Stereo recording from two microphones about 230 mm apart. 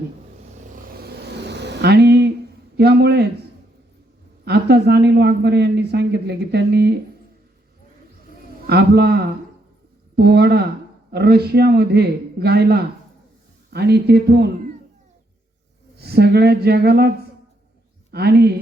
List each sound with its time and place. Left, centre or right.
0.7 s a sound: right
4.4 s speech: right
8.6 s speech: right
16.0 s speech: right
18.1 s speech: right